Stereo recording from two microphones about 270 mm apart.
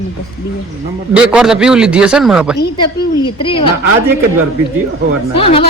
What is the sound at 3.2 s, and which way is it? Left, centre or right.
Speech, centre.